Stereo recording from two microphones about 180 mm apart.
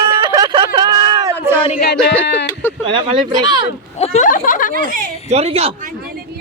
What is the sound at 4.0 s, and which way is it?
Speech, 35° left (ahead or behind).